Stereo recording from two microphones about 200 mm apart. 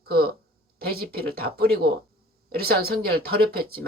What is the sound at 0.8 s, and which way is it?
Speech, 50° right (ahead or behind).